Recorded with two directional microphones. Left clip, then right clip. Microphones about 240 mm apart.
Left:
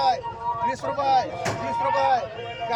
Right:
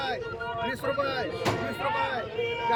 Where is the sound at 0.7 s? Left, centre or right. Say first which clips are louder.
Left 7 dB; centre.